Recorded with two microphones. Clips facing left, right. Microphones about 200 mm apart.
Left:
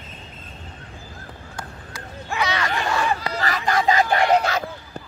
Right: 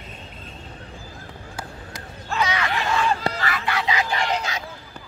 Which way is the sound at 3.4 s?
40° left (ahead or behind).